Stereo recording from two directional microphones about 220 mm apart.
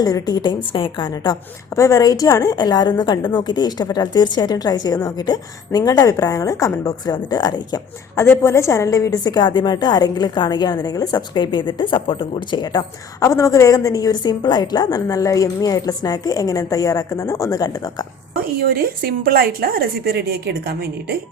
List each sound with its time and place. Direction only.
0.0 s a woman's voice: 15° left (ahead or behind)
18.6 s a woman's voice: 40° right (ahead or behind)